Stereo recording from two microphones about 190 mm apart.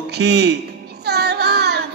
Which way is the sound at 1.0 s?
60° right (ahead or behind).